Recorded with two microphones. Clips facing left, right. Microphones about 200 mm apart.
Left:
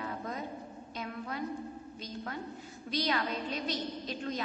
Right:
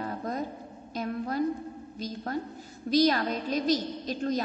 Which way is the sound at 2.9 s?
40° right (ahead or behind).